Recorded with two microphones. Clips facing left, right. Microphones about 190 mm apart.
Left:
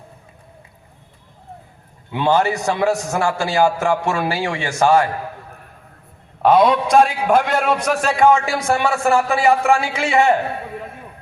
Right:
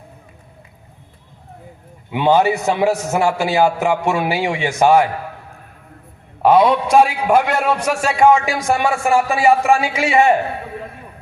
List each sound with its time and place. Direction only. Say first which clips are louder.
2.0 s a man's voice: right 3 dB; 15° right (ahead or behind)
6.4 s a man's voice: right 1 dB; 5° right (ahead or behind)